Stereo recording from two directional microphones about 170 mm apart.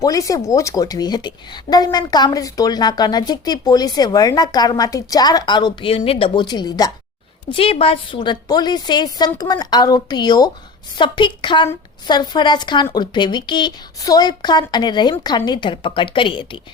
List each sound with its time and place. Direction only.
0.0 s a woman's voice: 20° left (ahead or behind)
7.5 s a woman's voice: 35° left (ahead or behind)